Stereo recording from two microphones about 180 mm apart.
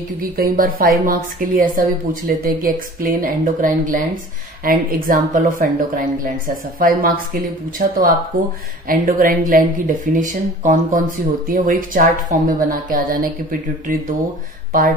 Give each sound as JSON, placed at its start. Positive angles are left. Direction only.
{"t": 0.2, "sound": "a woman's voice", "side_deg": -50}